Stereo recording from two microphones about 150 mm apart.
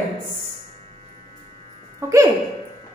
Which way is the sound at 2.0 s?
20° right (ahead or behind).